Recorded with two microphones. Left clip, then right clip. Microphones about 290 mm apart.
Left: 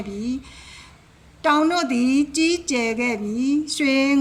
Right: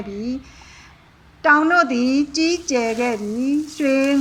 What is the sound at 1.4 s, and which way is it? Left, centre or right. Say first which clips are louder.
Speech: right 5 dB; centre.